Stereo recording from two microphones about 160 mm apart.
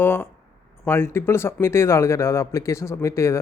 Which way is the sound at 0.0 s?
15° left (ahead or behind).